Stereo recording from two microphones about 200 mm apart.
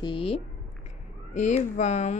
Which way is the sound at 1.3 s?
35° left (ahead or behind).